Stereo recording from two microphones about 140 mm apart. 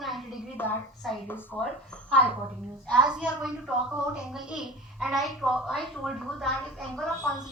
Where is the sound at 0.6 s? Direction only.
15° left (ahead or behind).